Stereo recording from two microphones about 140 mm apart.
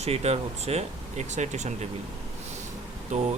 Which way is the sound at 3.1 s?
60° right (ahead or behind).